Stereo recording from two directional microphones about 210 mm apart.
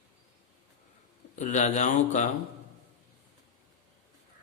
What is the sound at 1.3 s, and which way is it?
Speech, 35° left (ahead or behind).